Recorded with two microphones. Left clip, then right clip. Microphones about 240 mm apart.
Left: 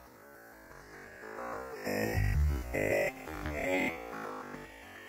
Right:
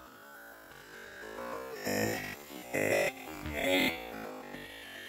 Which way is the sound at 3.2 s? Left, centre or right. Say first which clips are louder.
Left 2 dB; left.